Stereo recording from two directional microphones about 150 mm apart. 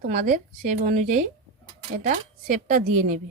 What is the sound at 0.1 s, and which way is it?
Speech, 60° right (ahead or behind).